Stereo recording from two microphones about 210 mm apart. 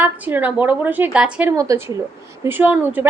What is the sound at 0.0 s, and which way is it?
Speech, 10° right (ahead or behind).